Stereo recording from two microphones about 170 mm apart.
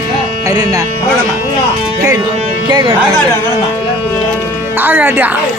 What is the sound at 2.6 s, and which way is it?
Music, 25° right (ahead or behind).